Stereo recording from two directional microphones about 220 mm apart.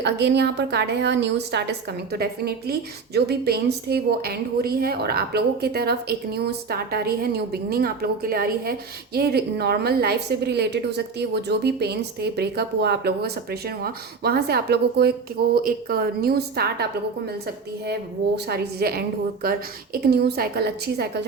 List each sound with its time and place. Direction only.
0.0 s a woman's voice: 50° right (ahead or behind)